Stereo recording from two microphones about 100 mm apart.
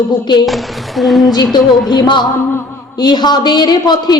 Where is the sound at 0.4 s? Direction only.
Centre (ahead or behind).